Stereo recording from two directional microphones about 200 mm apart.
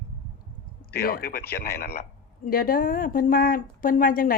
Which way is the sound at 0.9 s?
50° left (ahead or behind).